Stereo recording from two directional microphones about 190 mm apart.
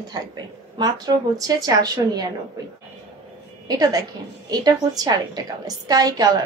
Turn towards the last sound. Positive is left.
turn(degrees=-20)  # may be behind; listen again after turning